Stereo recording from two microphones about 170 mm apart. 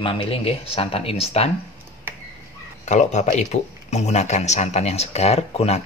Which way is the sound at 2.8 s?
45° left (ahead or behind).